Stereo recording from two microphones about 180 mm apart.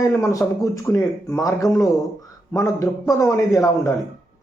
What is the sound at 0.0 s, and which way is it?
Speech, 15° left (ahead or behind).